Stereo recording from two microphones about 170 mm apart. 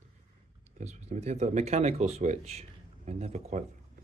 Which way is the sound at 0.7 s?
45° right (ahead or behind).